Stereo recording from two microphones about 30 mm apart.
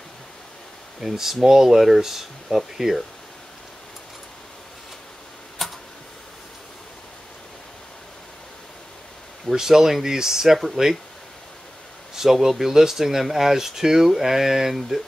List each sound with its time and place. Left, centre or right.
1.0 s speech: centre
5.6 s a sound: centre
9.5 s speech: centre
12.2 s speech: centre